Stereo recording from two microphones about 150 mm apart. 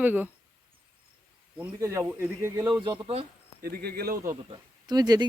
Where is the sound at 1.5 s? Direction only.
15° right (ahead or behind); by 3.1 s 30° right (ahead or behind).